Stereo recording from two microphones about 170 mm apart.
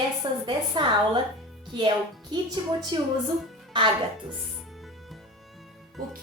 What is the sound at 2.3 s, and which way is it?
A woman's voice, 25° right (ahead or behind).